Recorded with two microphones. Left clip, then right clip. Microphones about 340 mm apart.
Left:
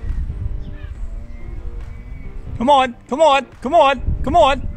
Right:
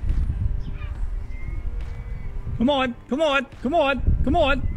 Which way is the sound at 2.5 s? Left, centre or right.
Centre.